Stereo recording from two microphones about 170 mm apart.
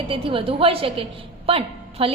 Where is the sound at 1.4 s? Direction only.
35° right (ahead or behind).